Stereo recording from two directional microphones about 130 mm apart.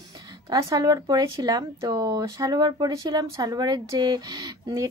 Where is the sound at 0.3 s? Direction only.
30° right (ahead or behind).